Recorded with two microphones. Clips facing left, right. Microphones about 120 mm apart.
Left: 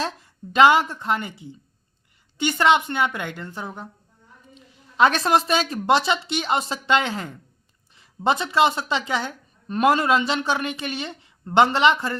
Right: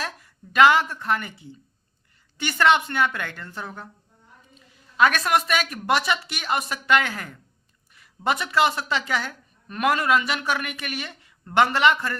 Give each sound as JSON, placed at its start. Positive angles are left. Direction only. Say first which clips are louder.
{"t": 0.0, "sound": "speech", "louder": "left 5 dB", "side_deg": 25}
{"t": 4.9, "sound": "speech", "louder": "left 2 dB", "side_deg": 25}